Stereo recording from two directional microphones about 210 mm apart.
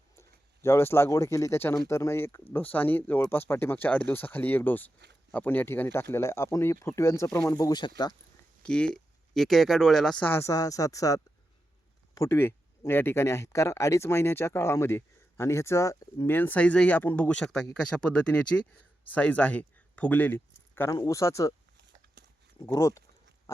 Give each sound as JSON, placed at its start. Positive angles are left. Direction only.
{"t": 0.2, "sound": "speech", "side_deg": 15}
{"t": 8.6, "sound": "speech", "side_deg": 5}
{"t": 22.6, "sound": "speech", "side_deg": 15}